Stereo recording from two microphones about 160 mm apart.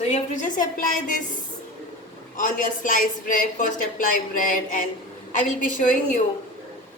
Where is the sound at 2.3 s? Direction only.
55° left (ahead or behind).